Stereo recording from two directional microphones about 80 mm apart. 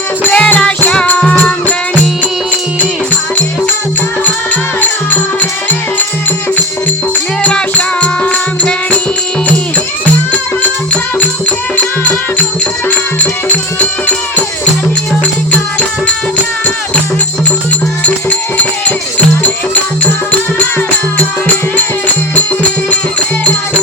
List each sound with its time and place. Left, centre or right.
0.3 s music: centre
4.8 s music: left
7.4 s music: centre
11.8 s music: centre
13.5 s music: centre
18.0 s music: centre
21.2 s music: centre